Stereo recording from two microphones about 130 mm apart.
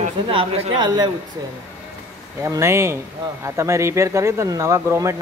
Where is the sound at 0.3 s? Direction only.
45° right (ahead or behind).